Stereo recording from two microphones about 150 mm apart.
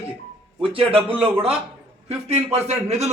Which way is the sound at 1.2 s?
40° right (ahead or behind).